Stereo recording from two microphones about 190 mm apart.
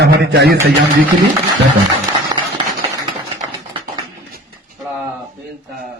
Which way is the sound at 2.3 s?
20° right (ahead or behind).